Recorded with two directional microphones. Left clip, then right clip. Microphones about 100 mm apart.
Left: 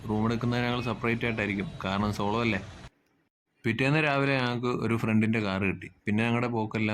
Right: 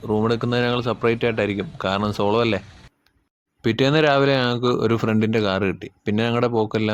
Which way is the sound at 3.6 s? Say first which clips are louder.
Right 8 dB; 40° right (ahead or behind).